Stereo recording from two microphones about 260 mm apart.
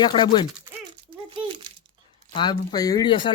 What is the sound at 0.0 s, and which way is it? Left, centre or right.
Speech, centre.